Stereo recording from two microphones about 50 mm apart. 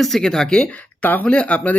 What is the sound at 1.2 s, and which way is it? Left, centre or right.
Speech, left.